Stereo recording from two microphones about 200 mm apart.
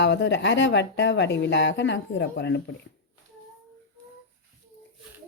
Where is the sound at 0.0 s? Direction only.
60° left (ahead or behind).